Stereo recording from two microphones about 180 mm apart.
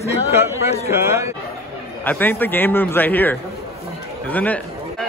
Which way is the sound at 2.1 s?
10° left (ahead or behind).